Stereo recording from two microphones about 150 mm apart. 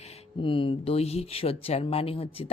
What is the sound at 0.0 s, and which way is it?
Speech, 40° left (ahead or behind).